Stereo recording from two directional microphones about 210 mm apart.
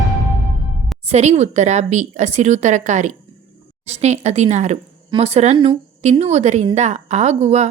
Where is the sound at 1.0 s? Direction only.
30° right (ahead or behind).